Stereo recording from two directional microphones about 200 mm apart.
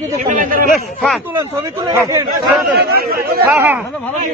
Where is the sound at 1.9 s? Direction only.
15° right (ahead or behind).